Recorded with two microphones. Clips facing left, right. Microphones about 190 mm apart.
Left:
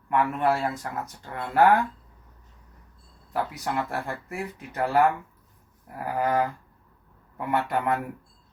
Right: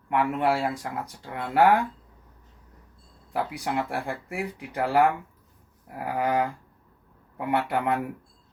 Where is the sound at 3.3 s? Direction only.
15° right (ahead or behind).